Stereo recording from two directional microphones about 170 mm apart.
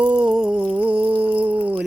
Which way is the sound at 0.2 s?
5° right (ahead or behind).